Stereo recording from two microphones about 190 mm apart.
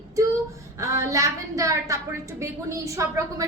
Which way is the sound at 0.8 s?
15° right (ahead or behind).